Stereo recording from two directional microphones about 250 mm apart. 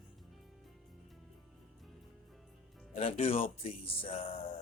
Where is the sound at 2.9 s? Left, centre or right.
Left.